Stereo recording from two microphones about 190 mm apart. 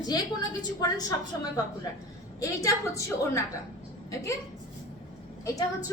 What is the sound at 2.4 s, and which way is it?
A woman's voice, 15° left (ahead or behind).